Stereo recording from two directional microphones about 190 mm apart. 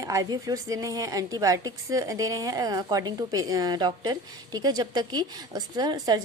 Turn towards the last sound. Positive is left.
turn(degrees=-20)  # may be behind; listen again after turning